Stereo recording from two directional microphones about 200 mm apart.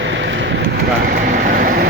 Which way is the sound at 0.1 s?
65° right (ahead or behind).